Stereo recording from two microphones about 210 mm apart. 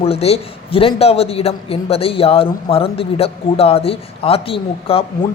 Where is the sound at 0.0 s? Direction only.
30° left (ahead or behind).